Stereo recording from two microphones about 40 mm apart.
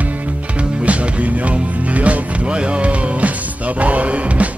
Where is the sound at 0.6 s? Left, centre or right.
Right.